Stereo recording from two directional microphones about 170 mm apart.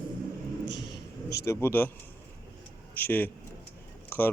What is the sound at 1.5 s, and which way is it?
Speech, 15° left (ahead or behind).